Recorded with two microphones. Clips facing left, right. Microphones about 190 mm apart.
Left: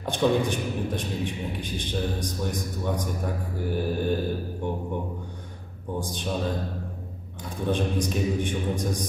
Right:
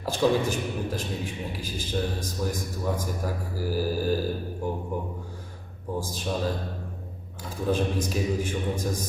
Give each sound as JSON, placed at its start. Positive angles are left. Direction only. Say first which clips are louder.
{"t": 0.0, "sound": "speech", "louder": "even", "side_deg": -5}
{"t": 7.7, "sound": "speech", "louder": "even", "side_deg": -5}